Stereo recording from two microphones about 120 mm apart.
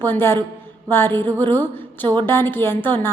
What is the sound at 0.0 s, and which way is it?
A woman's voice, 20° left (ahead or behind).